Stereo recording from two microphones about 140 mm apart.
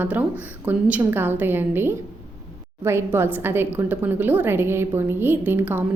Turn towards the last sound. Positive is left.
turn(degrees=-15)  # may be behind; listen again after turning